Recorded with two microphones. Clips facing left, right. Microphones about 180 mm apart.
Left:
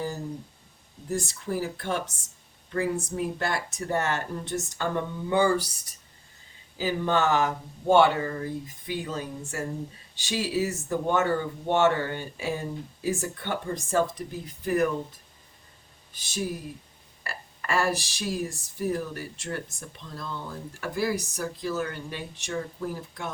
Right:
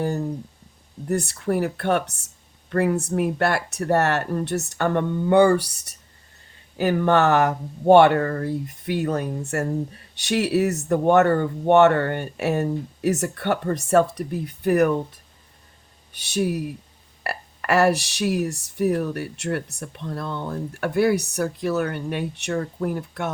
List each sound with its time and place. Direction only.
0.0 s a sound: 60° right (ahead or behind)
1.0 s speech: 65° right (ahead or behind)
16.1 s speech: 65° right (ahead or behind)